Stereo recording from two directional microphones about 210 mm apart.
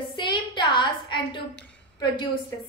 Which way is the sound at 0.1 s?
20° left (ahead or behind).